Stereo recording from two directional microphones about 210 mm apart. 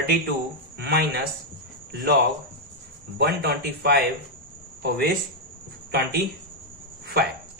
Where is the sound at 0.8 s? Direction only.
50° right (ahead or behind).